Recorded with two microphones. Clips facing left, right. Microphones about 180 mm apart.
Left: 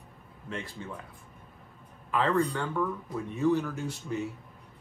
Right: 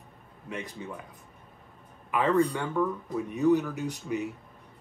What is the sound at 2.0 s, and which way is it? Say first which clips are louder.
Speech: right 2 dB; 15° right (ahead or behind).